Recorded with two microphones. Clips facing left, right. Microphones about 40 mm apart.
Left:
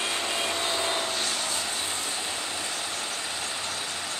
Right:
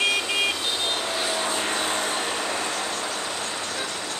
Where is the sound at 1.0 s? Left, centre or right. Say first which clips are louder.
Right 3 dB; centre.